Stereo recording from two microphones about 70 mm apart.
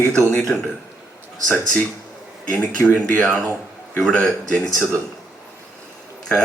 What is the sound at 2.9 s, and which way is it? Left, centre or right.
A man's voice, centre.